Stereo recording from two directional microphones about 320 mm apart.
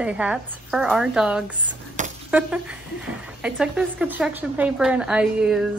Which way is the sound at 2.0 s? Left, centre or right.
Right.